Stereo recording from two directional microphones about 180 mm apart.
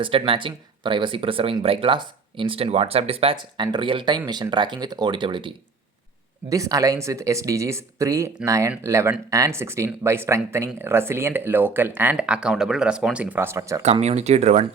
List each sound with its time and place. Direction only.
0.0 s speech: 30° right (ahead or behind)
6.5 s speech: 20° right (ahead or behind)
14.0 s speech: 40° right (ahead or behind)